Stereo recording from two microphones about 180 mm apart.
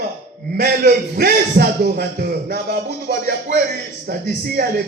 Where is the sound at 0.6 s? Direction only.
55° right (ahead or behind).